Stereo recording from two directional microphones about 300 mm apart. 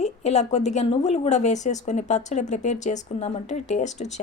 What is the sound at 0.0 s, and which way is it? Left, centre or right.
Speech, left.